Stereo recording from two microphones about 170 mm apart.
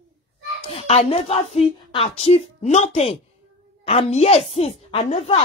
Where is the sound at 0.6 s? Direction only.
35° left (ahead or behind).